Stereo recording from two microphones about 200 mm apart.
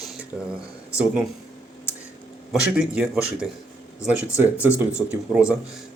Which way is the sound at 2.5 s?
5° right (ahead or behind).